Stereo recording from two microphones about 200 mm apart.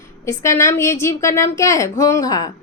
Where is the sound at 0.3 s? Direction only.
15° left (ahead or behind).